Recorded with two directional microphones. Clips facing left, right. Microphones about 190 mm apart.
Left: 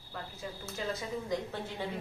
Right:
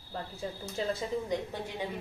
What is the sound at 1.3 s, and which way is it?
Speech, 15° right (ahead or behind).